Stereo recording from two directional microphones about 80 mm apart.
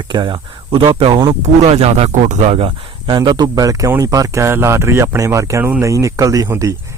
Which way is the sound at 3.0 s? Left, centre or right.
Right.